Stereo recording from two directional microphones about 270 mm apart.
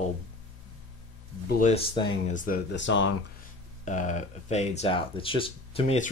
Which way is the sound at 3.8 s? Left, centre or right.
Left.